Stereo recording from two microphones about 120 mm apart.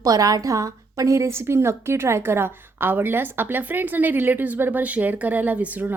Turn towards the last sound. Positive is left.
turn(degrees=-15)  # may be behind; listen again after turning